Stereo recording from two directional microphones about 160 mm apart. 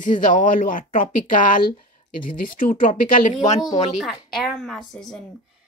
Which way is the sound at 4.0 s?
Centre (ahead or behind).